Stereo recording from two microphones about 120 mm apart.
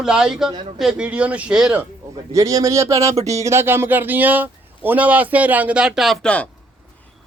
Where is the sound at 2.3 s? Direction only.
30° right (ahead or behind); by 6.4 s 5° left (ahead or behind).